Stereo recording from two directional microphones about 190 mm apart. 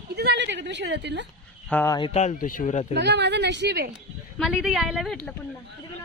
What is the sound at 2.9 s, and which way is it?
Speech, 65° right (ahead or behind).